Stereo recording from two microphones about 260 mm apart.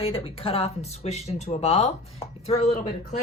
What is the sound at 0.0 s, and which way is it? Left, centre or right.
Speech, left.